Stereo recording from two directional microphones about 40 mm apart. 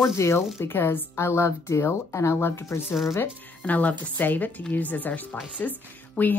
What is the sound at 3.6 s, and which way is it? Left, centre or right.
A woman's voice, left.